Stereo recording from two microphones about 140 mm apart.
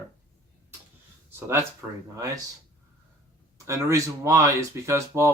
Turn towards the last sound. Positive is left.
turn(degrees=-20)  # may be behind; listen again after turning